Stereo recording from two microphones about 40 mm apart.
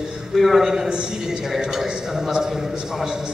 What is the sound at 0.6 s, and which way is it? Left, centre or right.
A man's voice, centre.